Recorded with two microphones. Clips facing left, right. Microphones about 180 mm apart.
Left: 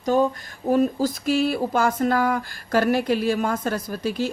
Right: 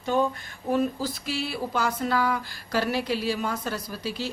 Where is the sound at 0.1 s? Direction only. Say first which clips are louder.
Left 3 dB; 40° left (ahead or behind).